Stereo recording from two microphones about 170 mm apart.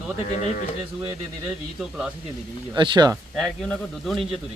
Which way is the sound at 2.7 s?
25° right (ahead or behind).